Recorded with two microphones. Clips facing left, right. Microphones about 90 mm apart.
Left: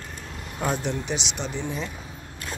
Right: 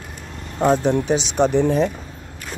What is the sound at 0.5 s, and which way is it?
Speech, 30° right (ahead or behind).